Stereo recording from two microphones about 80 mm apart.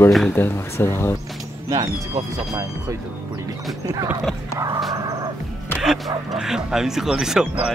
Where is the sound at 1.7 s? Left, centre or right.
Right.